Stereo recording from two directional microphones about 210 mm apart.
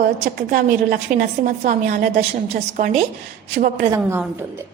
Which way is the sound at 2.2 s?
30° right (ahead or behind).